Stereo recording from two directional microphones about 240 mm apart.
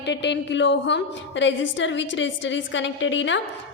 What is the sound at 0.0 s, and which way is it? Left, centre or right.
A woman's voice, left.